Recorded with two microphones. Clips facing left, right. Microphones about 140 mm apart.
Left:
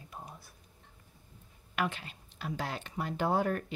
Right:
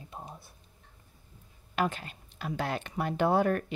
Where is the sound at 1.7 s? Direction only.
45° right (ahead or behind).